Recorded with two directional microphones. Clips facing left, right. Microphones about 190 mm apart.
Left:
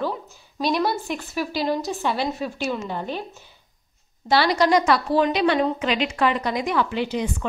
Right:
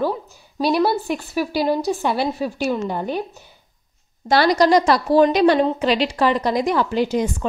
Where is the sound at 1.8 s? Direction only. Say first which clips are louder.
Right 4 dB; 40° right (ahead or behind).